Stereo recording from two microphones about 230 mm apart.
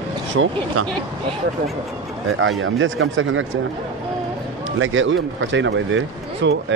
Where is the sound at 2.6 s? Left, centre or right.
Right.